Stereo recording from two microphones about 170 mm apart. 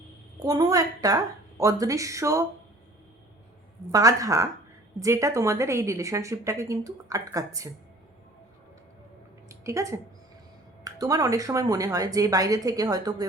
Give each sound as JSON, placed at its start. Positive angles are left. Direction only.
{"t": 0.3, "sound": "speech", "side_deg": -20}
{"t": 3.9, "sound": "a woman's voice", "side_deg": -20}
{"t": 9.5, "sound": "speech", "side_deg": -20}